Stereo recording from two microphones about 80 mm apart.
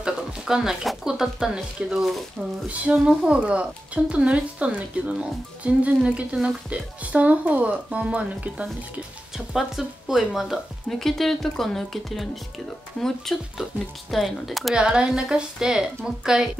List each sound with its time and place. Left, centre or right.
0.0 s speech: centre
7.0 s speech: centre
9.5 s speech: centre
14.8 s speech: centre